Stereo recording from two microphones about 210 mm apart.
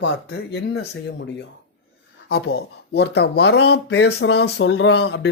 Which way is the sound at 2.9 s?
55° left (ahead or behind).